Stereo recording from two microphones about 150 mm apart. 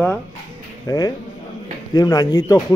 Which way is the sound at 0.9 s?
25° left (ahead or behind).